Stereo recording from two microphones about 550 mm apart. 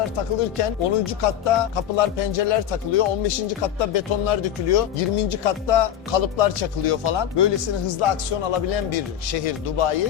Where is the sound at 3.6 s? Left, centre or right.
Left.